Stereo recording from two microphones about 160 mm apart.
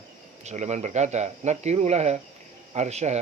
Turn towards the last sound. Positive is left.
turn(degrees=-45)  # may be behind; listen again after turning